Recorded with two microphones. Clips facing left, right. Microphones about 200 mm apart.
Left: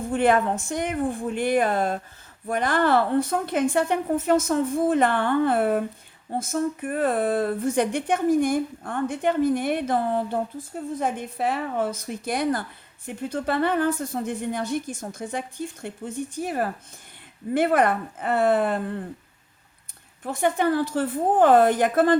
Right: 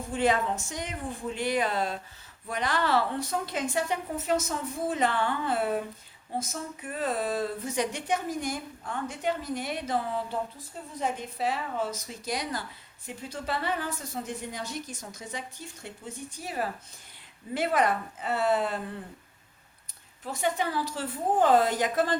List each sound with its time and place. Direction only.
0.1 s speech: 55° left (ahead or behind)
20.2 s speech: 55° left (ahead or behind)